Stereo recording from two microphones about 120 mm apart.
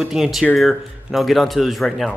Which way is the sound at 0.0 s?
5° right (ahead or behind).